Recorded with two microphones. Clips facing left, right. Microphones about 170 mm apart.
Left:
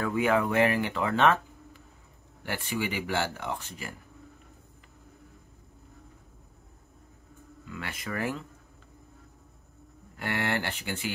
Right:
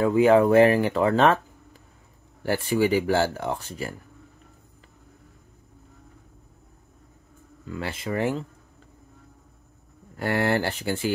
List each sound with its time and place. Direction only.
0.0 s speech: 30° right (ahead or behind)
2.4 s speech: 35° right (ahead or behind)
7.6 s speech: 30° right (ahead or behind)
10.1 s speech: 40° right (ahead or behind)